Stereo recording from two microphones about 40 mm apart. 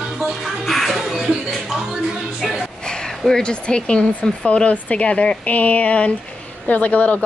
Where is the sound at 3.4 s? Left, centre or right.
Left.